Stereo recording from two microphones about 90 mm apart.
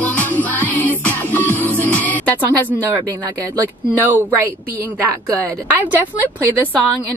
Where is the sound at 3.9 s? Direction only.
20° right (ahead or behind).